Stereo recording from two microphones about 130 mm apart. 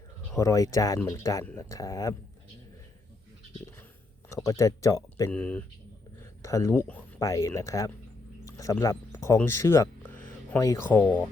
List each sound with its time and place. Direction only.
0.3 s speech: 25° left (ahead or behind)
4.3 s speech: 25° left (ahead or behind)
5.3 s speech: 10° left (ahead or behind)
6.4 s speech: 25° left (ahead or behind)
8.4 s a sound: 25° left (ahead or behind)
8.8 s speech: 25° left (ahead or behind)
10.8 s speech: 15° left (ahead or behind)